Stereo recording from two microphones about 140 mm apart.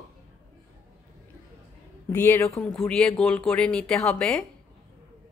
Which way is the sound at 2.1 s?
20° left (ahead or behind).